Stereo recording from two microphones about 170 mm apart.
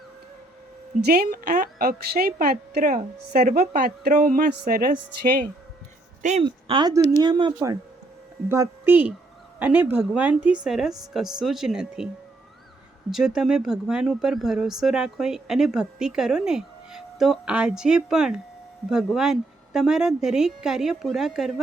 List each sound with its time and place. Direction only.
1.0 s a woman's voice: 70° right (ahead or behind)
6.4 s speech: 30° right (ahead or behind); by 12.0 s 5° right (ahead or behind)
13.1 s speech: centre (ahead or behind)